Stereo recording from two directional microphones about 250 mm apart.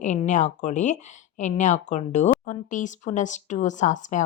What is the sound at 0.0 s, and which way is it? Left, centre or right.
A woman's voice, left.